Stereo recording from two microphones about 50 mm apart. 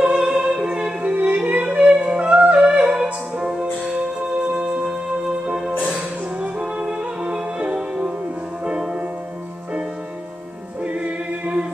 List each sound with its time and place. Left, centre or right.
0.0 s music: centre
6.4 s music: centre
10.8 s choir: right